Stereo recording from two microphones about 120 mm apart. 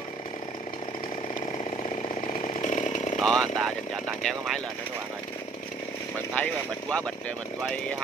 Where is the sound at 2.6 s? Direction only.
90° left.